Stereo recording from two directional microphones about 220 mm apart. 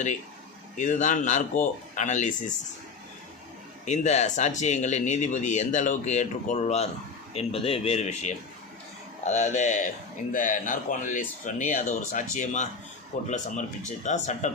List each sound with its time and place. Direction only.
0.8 s speech: 35° left (ahead or behind)
3.8 s speech: 30° left (ahead or behind)